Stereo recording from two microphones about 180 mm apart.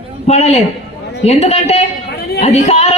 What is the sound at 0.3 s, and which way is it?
A woman's voice, 35° left (ahead or behind).